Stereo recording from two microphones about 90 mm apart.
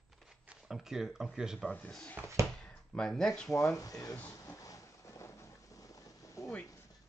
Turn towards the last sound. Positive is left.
turn(degrees=35)  # may be behind; listen again after turning